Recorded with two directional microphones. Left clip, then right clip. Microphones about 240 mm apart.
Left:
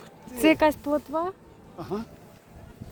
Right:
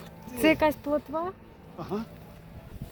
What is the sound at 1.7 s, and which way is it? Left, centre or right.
Speech, left.